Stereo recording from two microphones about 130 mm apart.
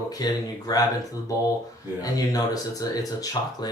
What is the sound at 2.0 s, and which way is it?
Speech, 30° left (ahead or behind).